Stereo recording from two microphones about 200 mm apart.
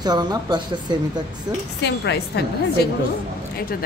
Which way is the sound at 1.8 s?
60° left (ahead or behind).